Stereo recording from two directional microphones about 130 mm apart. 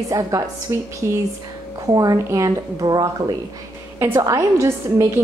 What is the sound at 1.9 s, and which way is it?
A woman's voice, 25° right (ahead or behind).